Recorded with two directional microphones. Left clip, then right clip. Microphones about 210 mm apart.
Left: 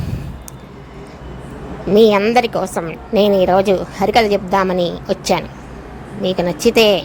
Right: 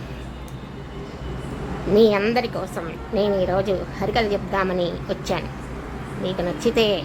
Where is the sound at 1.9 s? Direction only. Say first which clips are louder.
Left 6 dB; 25° left (ahead or behind).